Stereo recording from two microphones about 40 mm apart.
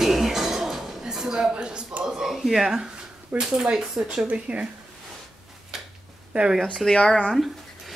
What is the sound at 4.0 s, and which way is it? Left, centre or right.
Speech, right.